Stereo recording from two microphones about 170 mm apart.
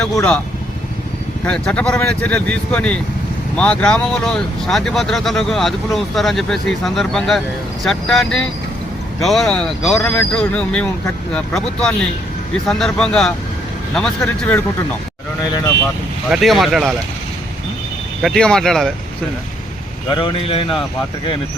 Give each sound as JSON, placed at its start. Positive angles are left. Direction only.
{"t": 1.5, "sound": "speech", "side_deg": 5}
{"t": 16.3, "sound": "speech", "side_deg": 0}
{"t": 18.2, "sound": "speech", "side_deg": 5}
{"t": 20.1, "sound": "speech", "side_deg": 30}